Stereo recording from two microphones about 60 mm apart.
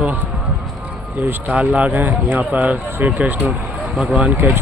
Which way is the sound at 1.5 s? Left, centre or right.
Right.